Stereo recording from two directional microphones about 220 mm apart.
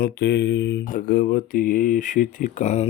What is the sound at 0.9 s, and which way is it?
Speech, 35° left (ahead or behind).